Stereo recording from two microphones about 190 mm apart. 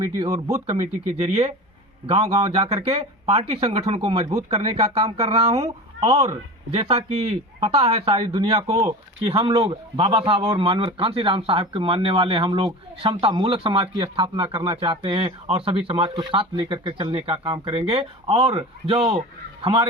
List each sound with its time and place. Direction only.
0.0 s speech: 20° right (ahead or behind)
0.5 s speech: 35° right (ahead or behind)